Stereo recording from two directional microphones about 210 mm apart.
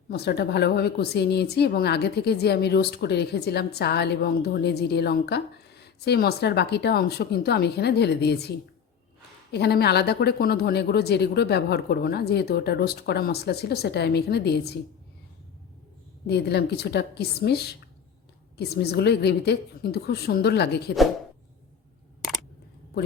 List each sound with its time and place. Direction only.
0.1 s a woman's voice: 50° left (ahead or behind)
16.2 s a woman's voice: 50° left (ahead or behind)